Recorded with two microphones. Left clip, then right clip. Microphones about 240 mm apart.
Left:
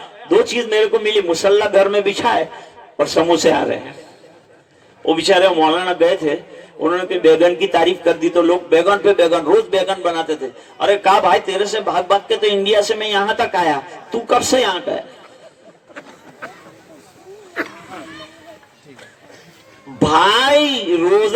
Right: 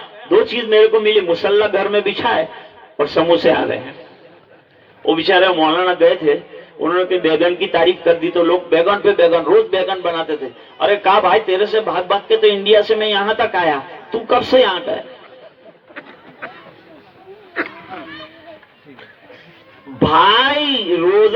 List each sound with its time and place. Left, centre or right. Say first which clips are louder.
0.3 s speech: right 1 dB; left
5.0 s speech: even; left
17.5 s a sound: right 2 dB; centre
20.0 s speech: right 1 dB; left